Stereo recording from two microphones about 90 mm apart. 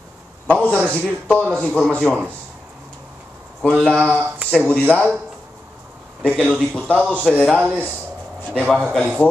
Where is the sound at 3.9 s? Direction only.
20° right (ahead or behind).